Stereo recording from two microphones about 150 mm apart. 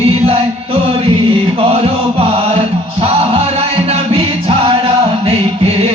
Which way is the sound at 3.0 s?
40° right (ahead or behind).